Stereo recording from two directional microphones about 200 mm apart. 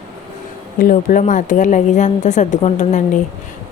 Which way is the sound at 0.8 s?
45° left (ahead or behind).